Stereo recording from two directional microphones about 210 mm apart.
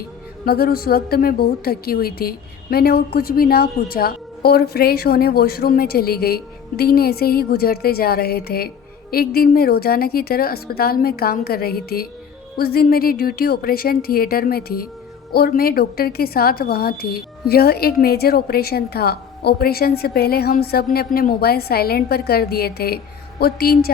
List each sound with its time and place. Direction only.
0.4 s a woman's voice: 45° left (ahead or behind)